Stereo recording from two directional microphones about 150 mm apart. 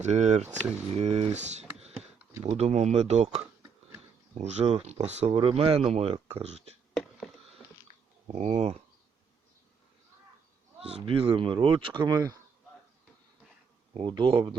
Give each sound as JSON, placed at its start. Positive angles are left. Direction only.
{"t": 0.0, "sound": "speech", "side_deg": -50}
{"t": 3.4, "sound": "a sound", "side_deg": -15}
{"t": 4.4, "sound": "speech", "side_deg": -50}
{"t": 6.9, "sound": "a sound", "side_deg": 0}
{"t": 8.3, "sound": "speech", "side_deg": -45}
{"t": 10.8, "sound": "speech", "side_deg": -40}
{"t": 13.9, "sound": "speech", "side_deg": -30}